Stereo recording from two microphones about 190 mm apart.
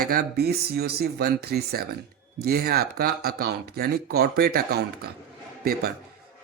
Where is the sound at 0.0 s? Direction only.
55° right (ahead or behind).